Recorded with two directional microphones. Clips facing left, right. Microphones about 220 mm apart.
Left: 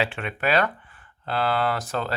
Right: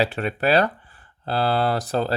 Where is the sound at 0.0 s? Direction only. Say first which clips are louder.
Right 4 dB; 40° right (ahead or behind).